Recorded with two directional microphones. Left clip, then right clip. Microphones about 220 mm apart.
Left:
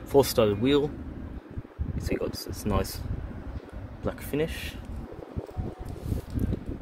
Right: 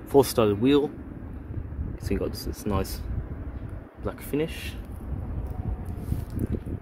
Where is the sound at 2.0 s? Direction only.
5° right (ahead or behind).